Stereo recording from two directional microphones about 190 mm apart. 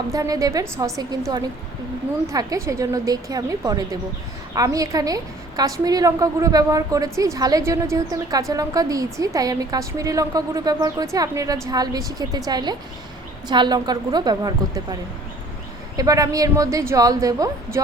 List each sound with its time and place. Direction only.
0.1 s a woman's voice: 20° right (ahead or behind)
16.0 s a woman's voice: 20° right (ahead or behind)